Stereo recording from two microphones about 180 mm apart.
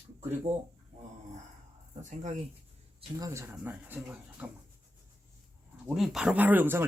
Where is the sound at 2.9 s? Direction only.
20° right (ahead or behind).